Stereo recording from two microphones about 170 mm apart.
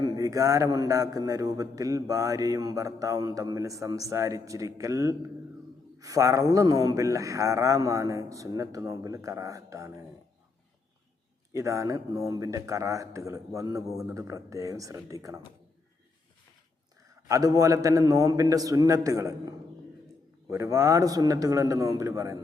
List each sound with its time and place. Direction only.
0.0 s a man's voice: 20° right (ahead or behind)
11.5 s a man's voice: 20° right (ahead or behind)
17.2 s a man's voice: 20° right (ahead or behind)